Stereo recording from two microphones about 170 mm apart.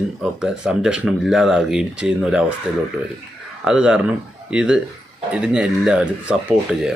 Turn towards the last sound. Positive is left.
turn(degrees=-5)  # may be behind; listen again after turning